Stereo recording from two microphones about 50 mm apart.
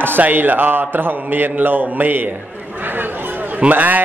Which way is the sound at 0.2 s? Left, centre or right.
Right.